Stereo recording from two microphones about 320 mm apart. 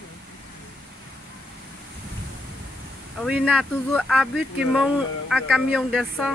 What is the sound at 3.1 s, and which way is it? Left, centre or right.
Speech, centre.